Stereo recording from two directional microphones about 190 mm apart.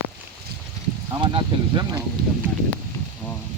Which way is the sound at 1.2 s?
25° right (ahead or behind).